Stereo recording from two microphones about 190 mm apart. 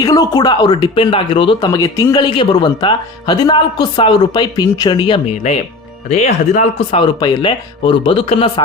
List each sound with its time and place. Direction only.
0.0 s speech: 20° left (ahead or behind)
6.1 s speech: 35° left (ahead or behind)